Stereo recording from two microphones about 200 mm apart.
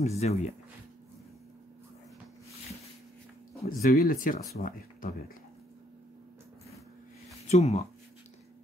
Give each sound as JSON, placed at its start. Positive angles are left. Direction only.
{"t": 0.0, "sound": "speech", "side_deg": 30}
{"t": 3.6, "sound": "speech", "side_deg": 45}
{"t": 7.4, "sound": "speech", "side_deg": 30}